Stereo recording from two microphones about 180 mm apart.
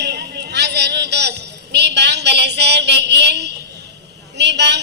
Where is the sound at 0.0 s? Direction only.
70° right (ahead or behind).